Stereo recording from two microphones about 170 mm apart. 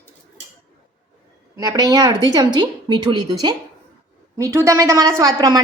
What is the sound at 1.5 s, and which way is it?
A woman's voice, 20° right (ahead or behind).